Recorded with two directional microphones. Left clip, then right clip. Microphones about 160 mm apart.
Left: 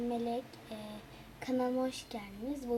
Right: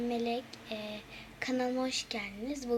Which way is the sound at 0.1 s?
5° right (ahead or behind).